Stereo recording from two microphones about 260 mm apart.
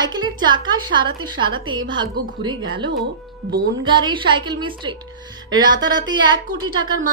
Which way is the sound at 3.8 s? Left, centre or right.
Centre.